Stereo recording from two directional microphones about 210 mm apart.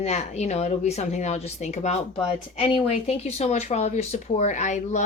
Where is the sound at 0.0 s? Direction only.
30° left (ahead or behind).